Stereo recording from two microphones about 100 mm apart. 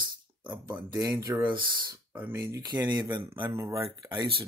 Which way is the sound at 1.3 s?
30° right (ahead or behind).